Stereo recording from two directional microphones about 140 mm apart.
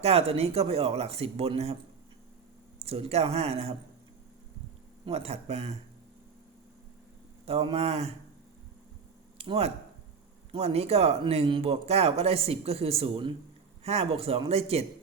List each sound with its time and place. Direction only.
0.0 s speech: 45° right (ahead or behind)
5.0 s speech: 45° right (ahead or behind)
7.4 s speech: 45° right (ahead or behind)
9.4 s speech: 45° right (ahead or behind)